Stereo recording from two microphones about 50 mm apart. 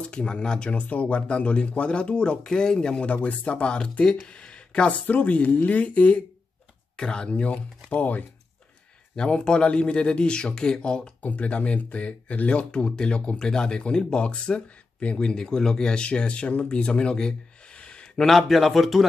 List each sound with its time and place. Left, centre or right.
0.0 s speech: centre
5.0 s speech: left
9.1 s speech: centre
11.2 s speech: left
18.2 s speech: centre